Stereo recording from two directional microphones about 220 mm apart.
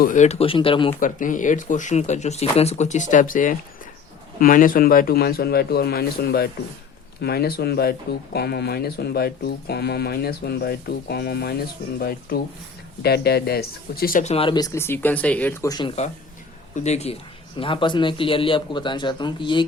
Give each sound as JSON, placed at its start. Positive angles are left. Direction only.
{"t": 0.0, "sound": "speech", "side_deg": 35}
{"t": 0.9, "sound": "speech", "side_deg": 35}
{"t": 16.7, "sound": "speech", "side_deg": 30}